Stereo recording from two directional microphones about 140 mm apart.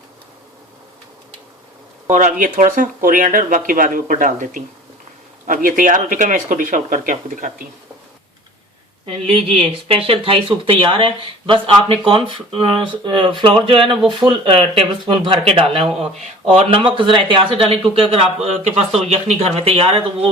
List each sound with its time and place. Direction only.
2.0 s speech: 60° right (ahead or behind)
5.6 s speech: 75° right (ahead or behind)
9.0 s speech: 45° right (ahead or behind)